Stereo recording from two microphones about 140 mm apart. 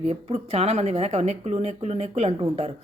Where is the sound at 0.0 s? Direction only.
50° right (ahead or behind).